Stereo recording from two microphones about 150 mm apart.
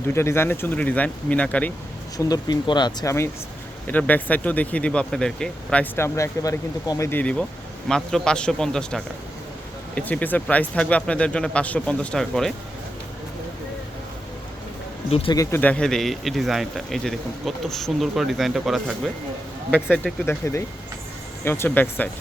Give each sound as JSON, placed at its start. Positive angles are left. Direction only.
{"t": 0.1, "sound": "speech", "side_deg": 15}
{"t": 2.1, "sound": "speech", "side_deg": 25}
{"t": 3.8, "sound": "speech", "side_deg": 10}
{"t": 15.1, "sound": "speech", "side_deg": 40}
{"t": 15.4, "sound": "speech", "side_deg": 15}